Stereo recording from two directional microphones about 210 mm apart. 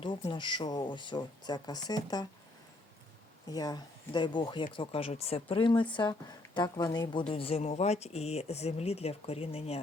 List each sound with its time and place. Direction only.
0.0 s speech: 20° left (ahead or behind)
3.5 s speech: 20° left (ahead or behind)